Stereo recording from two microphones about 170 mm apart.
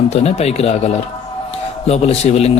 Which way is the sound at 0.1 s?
40° left (ahead or behind).